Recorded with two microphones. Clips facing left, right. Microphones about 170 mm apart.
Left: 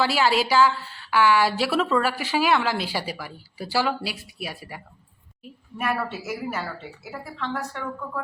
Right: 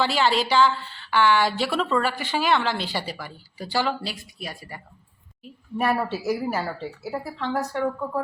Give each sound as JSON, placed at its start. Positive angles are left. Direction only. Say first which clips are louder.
{"t": 0.0, "sound": "a woman's voice", "louder": "even", "side_deg": 5}
{"t": 5.7, "sound": "a woman's voice", "louder": "right 4 dB", "side_deg": -30}